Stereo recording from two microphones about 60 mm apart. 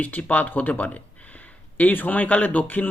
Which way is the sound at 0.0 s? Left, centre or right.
Left.